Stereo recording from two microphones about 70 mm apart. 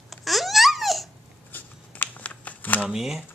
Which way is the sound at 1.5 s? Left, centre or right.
Left.